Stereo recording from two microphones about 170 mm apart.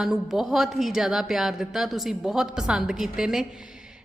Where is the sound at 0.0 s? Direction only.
Centre (ahead or behind).